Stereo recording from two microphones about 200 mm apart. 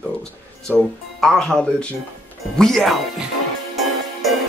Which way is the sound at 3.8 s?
Centre (ahead or behind).